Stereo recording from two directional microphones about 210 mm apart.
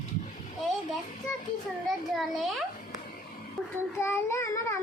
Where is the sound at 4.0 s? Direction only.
10° left (ahead or behind).